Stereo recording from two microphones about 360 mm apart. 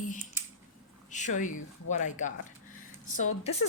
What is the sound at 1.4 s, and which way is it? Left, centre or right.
Speech, left.